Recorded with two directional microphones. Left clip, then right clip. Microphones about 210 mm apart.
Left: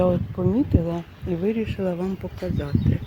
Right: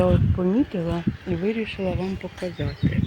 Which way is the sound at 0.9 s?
15° left (ahead or behind).